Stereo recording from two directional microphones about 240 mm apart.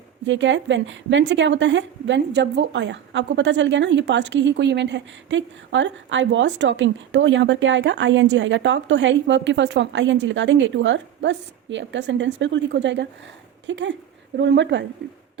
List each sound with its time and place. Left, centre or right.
0.3 s a woman's voice: right